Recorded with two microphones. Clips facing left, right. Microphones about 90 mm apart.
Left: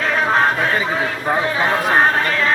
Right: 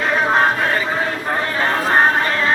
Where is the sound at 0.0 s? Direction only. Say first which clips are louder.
Even; 5° right (ahead or behind).